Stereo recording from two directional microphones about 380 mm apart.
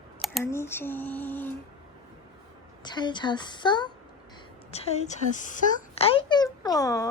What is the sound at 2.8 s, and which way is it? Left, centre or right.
A child's voice, centre.